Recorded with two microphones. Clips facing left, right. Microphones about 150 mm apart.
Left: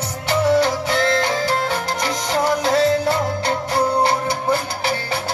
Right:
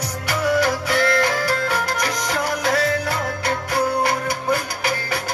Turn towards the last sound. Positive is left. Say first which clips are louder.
# left 2 dB
turn(degrees=25)  # may be behind; listen again after turning